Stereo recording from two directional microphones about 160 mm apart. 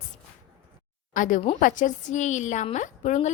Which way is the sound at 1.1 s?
55° left (ahead or behind).